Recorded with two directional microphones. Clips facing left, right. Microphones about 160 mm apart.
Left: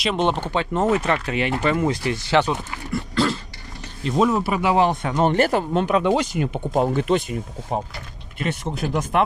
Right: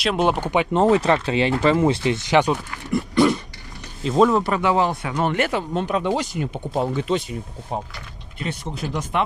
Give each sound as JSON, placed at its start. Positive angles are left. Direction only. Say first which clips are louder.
{"t": 0.0, "sound": "speech", "louder": "right 1 dB", "side_deg": -5}
{"t": 0.7, "sound": "speech", "louder": "right 3 dB", "side_deg": -30}
{"t": 4.2, "sound": "speech", "louder": "right 2 dB", "side_deg": 5}
{"t": 5.7, "sound": "speech", "louder": "left 3 dB", "side_deg": 85}
{"t": 6.7, "sound": "speech", "louder": "left 3 dB", "side_deg": 55}
{"t": 8.7, "sound": "speech", "louder": "left 3 dB", "side_deg": 55}